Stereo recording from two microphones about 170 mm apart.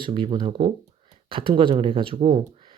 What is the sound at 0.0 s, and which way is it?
Speech, 30° right (ahead or behind).